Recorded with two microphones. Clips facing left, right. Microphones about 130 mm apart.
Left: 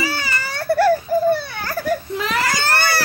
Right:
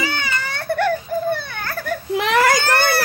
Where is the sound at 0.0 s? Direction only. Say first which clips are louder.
Even; 5° left (ahead or behind).